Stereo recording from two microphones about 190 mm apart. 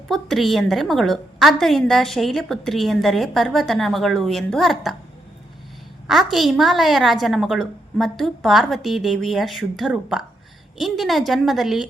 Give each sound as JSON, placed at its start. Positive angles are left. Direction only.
{"t": 0.1, "sound": "a woman's voice", "side_deg": 0}
{"t": 6.1, "sound": "a woman's voice", "side_deg": 0}